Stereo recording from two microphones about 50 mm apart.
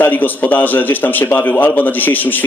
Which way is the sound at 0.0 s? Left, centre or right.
Left.